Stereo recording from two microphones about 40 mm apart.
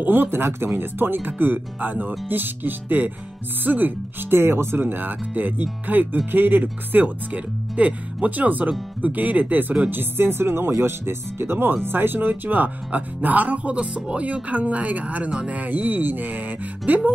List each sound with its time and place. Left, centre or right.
0.0 s speech: right
0.7 s speech: right
4.3 s speech: right
7.3 s speech: right
9.8 s speech: right